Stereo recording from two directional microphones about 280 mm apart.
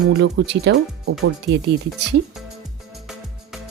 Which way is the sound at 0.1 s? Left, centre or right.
Right.